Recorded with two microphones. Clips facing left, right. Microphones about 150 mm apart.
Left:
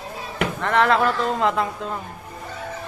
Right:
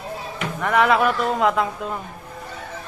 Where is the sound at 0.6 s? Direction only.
10° right (ahead or behind).